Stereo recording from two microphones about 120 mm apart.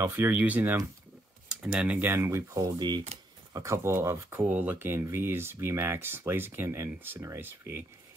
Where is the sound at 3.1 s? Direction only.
60° right (ahead or behind).